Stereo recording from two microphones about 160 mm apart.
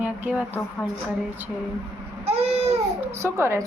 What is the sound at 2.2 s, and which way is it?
Baby cry, 40° right (ahead or behind).